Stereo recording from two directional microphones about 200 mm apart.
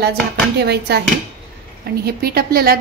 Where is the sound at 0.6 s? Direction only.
55° right (ahead or behind).